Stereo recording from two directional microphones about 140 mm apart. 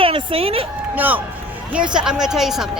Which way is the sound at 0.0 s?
40° right (ahead or behind).